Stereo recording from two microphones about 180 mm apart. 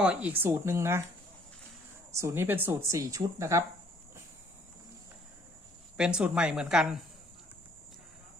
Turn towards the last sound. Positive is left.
turn(degrees=-5)  # may be behind; listen again after turning